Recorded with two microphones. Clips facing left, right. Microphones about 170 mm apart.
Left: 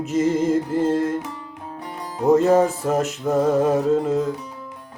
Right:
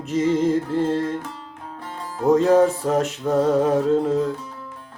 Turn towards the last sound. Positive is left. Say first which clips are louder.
# even
turn(degrees=5)  # may be behind; listen again after turning